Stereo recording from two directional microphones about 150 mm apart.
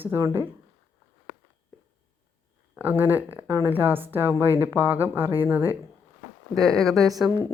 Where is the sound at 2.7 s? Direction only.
15° right (ahead or behind).